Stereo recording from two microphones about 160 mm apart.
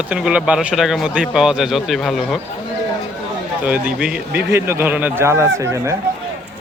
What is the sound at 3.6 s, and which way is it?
Speech, 10° right (ahead or behind).